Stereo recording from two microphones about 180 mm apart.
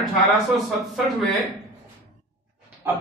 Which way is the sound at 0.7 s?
Centre (ahead or behind).